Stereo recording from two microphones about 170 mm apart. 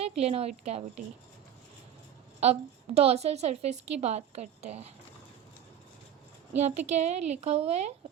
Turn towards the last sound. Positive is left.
turn(degrees=-40)  # may be behind; listen again after turning